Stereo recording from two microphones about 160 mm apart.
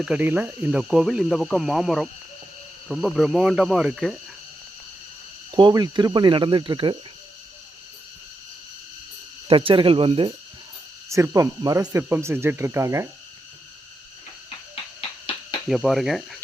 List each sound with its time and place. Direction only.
0.0 s cricket: 10° right (ahead or behind)
5.5 s speech: 30° right (ahead or behind)
9.5 s speech: 35° right (ahead or behind)
11.1 s speech: 20° right (ahead or behind)
15.7 s cricket: centre (ahead or behind)